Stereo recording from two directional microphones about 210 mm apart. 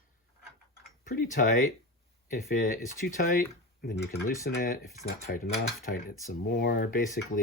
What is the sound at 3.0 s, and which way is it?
Speech, 40° left (ahead or behind).